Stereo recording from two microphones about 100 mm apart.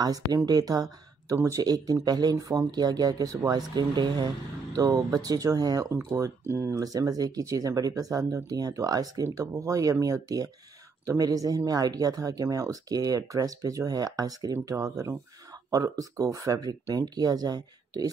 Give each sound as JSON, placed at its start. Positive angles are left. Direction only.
{"t": 0.0, "sound": "speech", "side_deg": -40}